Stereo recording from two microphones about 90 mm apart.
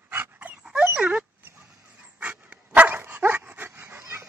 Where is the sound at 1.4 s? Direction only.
25° right (ahead or behind).